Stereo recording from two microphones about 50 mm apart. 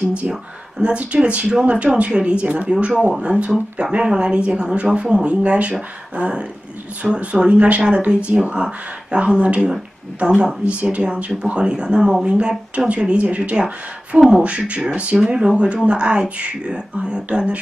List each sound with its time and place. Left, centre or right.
0.8 s speech: right